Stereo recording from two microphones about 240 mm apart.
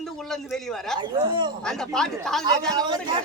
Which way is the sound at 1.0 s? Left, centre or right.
Centre.